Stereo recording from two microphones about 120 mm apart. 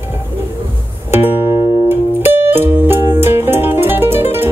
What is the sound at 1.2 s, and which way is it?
Music, 20° right (ahead or behind).